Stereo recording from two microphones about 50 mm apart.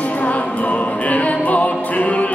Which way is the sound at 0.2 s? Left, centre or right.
Left.